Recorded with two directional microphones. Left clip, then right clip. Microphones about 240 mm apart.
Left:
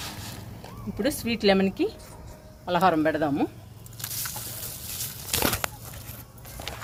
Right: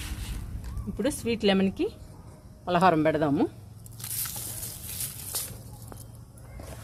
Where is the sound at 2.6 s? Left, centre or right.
Right.